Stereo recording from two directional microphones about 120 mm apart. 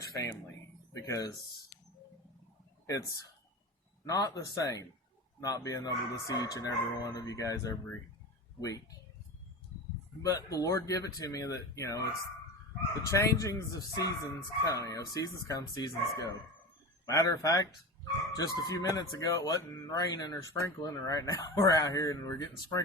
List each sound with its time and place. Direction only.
0.0 s a sound: 30° left (ahead or behind)
0.9 s speech: 30° left (ahead or behind)
2.8 s speech: 25° left (ahead or behind)
10.2 s speech: 30° left (ahead or behind)